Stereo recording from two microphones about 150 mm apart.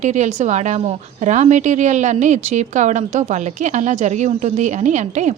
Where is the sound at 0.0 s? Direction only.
50° right (ahead or behind).